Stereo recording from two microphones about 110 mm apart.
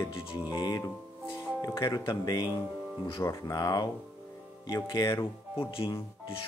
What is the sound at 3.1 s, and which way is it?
Speech, 25° left (ahead or behind).